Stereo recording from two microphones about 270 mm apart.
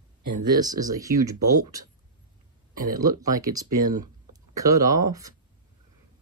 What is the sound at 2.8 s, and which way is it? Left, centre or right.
Speech, right.